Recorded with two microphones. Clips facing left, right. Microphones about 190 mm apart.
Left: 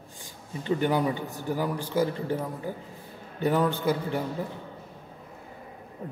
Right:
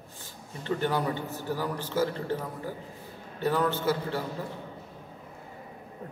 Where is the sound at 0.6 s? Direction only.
15° left (ahead or behind).